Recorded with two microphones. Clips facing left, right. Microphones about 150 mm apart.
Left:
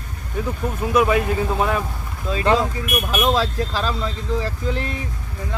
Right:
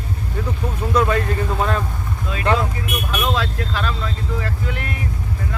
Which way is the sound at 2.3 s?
30° left (ahead or behind).